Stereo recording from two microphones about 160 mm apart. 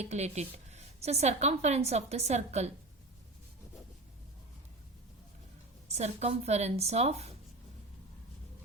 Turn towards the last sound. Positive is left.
turn(degrees=-40)  # may be behind; listen again after turning